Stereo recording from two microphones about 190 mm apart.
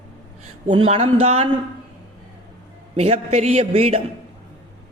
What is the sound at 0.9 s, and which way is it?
Speech, 30° right (ahead or behind).